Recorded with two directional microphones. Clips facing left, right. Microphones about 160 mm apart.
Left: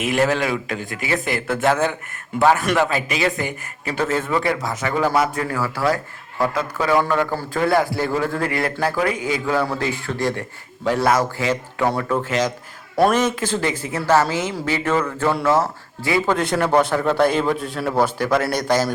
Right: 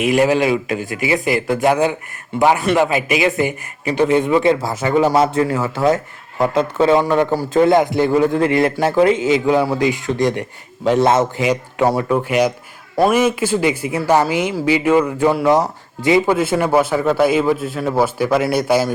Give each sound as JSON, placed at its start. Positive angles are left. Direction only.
{"t": 0.2, "sound": "a man's voice", "side_deg": -15}
{"t": 16.3, "sound": "a man's voice", "side_deg": -5}